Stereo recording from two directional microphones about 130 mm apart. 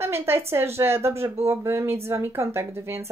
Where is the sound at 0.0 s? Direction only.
20° right (ahead or behind).